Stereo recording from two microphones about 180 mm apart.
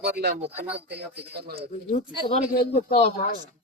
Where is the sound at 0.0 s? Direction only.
60° right (ahead or behind).